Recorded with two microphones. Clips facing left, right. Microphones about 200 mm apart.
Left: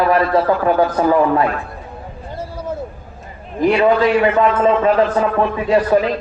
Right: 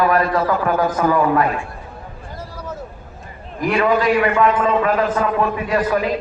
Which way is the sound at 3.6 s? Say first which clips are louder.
Left 6 dB; 25° left (ahead or behind).